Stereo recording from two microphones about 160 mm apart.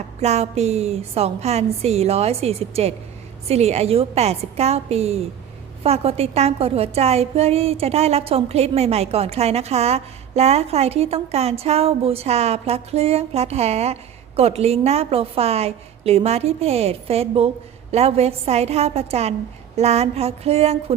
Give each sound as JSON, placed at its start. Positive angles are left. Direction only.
{"t": 0.2, "sound": "a woman's voice", "side_deg": -45}